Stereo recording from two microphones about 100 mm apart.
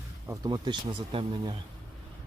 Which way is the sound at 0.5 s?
50° right (ahead or behind).